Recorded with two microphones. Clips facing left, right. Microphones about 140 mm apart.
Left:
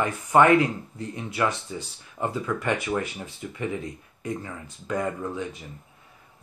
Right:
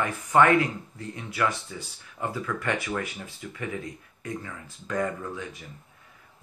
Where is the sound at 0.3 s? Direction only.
20° left (ahead or behind).